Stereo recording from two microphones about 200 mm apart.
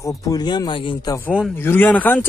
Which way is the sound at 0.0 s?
15° left (ahead or behind).